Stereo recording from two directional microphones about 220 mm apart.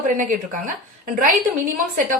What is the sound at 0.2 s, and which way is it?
Speech, 35° right (ahead or behind).